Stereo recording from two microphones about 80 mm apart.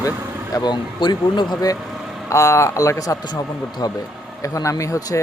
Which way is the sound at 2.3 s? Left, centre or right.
Left.